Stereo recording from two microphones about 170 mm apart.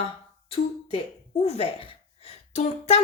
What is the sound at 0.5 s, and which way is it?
Speech, 30° left (ahead or behind).